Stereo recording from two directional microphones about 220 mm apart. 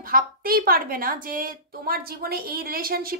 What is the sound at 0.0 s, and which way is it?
A woman's voice, 40° right (ahead or behind).